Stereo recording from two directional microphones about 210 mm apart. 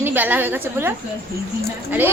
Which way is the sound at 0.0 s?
10° right (ahead or behind).